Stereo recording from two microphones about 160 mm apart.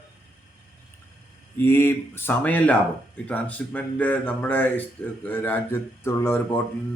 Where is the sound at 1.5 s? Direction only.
15° left (ahead or behind).